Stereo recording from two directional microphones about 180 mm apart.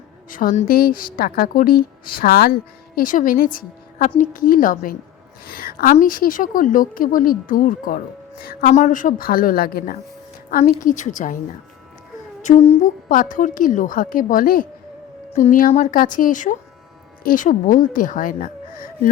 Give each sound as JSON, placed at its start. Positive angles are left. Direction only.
{"t": 0.3, "sound": "a woman's voice", "side_deg": 50}
{"t": 10.5, "sound": "a woman's voice", "side_deg": 45}
{"t": 12.4, "sound": "a woman's voice", "side_deg": 40}